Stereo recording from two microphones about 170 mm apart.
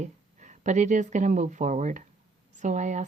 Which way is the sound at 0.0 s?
45° right (ahead or behind).